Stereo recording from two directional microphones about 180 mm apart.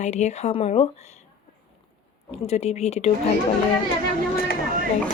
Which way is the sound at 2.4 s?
35° left (ahead or behind).